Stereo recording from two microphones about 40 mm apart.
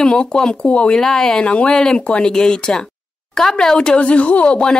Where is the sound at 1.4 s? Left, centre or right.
Left; by 3.8 s centre.